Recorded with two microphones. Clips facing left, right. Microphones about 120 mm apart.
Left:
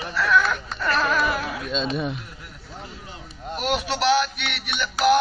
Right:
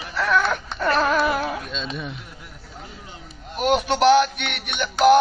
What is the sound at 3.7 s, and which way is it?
Music, 50° right (ahead or behind).